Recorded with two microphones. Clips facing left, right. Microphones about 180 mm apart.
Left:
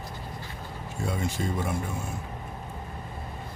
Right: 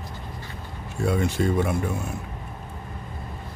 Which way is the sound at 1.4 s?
65° right (ahead or behind).